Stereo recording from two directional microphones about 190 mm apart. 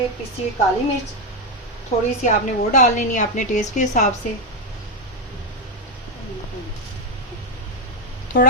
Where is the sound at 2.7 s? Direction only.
40° left (ahead or behind).